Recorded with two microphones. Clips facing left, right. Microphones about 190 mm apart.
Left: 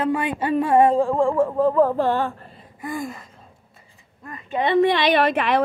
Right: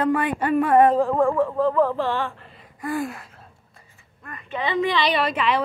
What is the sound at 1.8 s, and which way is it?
Speech, 40° left (ahead or behind).